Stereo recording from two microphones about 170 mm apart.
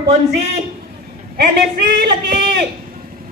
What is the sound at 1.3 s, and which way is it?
A woman's voice, 65° right (ahead or behind).